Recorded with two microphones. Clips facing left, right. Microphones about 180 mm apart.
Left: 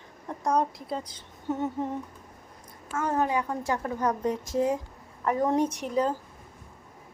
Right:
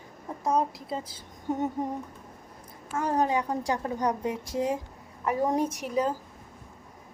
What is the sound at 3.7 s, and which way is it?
A woman's voice, 20° right (ahead or behind).